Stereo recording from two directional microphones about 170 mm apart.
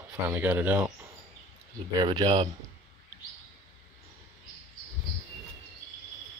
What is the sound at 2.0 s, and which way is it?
Speech, 25° right (ahead or behind).